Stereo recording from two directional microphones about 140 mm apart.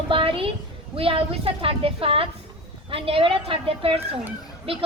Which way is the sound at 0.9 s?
40° right (ahead or behind).